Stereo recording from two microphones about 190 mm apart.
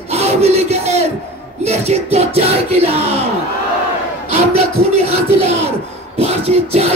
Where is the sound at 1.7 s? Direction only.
35° right (ahead or behind).